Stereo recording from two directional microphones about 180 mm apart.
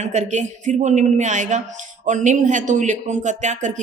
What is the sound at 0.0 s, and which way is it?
Speech, 40° right (ahead or behind).